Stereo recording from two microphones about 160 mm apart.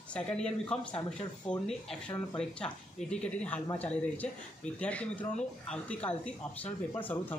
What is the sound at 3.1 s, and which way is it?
A man's voice, 5° left (ahead or behind).